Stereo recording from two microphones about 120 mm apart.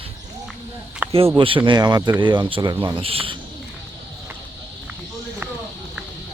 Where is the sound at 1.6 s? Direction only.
35° right (ahead or behind).